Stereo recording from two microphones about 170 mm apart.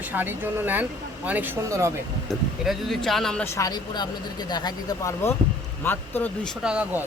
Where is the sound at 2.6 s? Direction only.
Centre (ahead or behind).